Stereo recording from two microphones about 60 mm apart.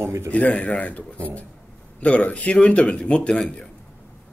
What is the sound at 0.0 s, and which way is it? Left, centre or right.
Speech, right.